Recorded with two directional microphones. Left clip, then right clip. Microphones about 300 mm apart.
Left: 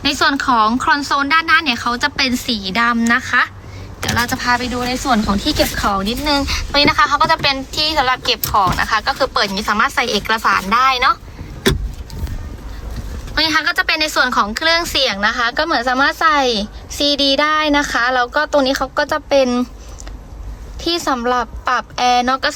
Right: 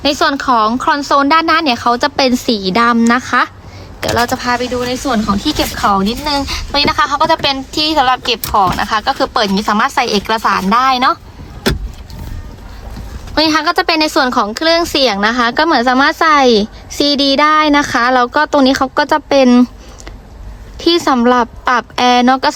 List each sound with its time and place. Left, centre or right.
0.0 s speech: centre
13.3 s speech: centre
21.1 s speech: right